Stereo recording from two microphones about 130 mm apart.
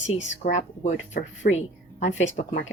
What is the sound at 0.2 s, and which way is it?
Speech, 65° left (ahead or behind).